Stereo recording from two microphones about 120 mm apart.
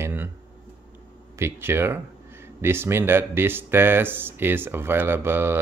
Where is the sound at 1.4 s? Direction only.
20° right (ahead or behind).